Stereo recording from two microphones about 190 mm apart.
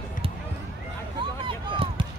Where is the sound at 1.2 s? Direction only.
25° right (ahead or behind).